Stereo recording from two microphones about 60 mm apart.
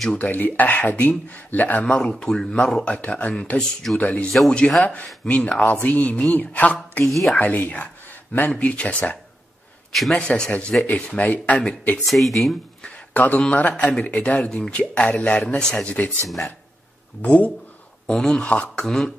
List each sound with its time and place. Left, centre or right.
0.1 s speech: left
2.0 s speech: centre
7.1 s speech: centre
7.3 s speech: left
12.1 s speech: centre
12.8 s a sound: left
13.4 s speech: left
17.2 s speech: left
18.0 s speech: centre
18.9 s speech: centre